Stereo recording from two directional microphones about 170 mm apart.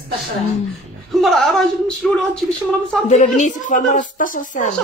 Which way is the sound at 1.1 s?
Centre (ahead or behind).